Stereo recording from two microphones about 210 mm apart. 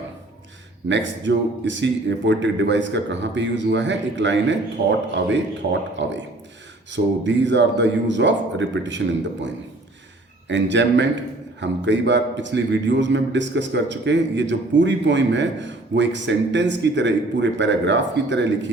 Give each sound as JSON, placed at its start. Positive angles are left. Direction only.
{"t": 0.9, "sound": "a man's voice", "side_deg": -60}
{"t": 10.5, "sound": "a man's voice", "side_deg": -60}